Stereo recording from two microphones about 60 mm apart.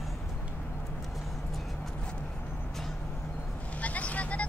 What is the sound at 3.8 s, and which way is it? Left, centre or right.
Vehicle, left.